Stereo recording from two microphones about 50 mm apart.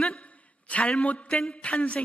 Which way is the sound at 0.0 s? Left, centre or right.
Centre.